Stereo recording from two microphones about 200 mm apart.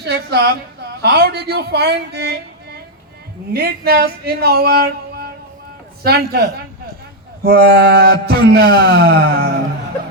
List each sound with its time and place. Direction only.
0.0 s a woman's voice: 55° right (ahead or behind)